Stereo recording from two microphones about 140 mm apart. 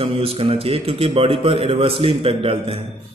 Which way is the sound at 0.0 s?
45° right (ahead or behind).